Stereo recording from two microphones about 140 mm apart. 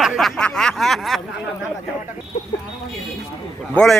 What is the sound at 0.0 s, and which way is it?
Snicker, centre (ahead or behind).